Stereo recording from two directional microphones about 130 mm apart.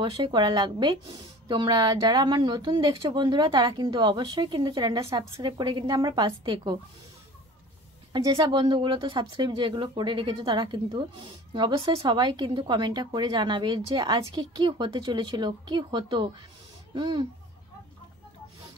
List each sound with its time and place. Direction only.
0.0 s speech: 35° right (ahead or behind)
8.1 s speech: 35° right (ahead or behind)